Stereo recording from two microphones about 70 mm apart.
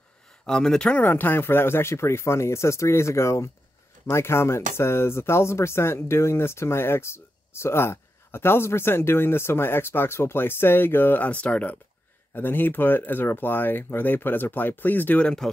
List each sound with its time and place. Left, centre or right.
0.5 s speech: centre
15.2 s speech: centre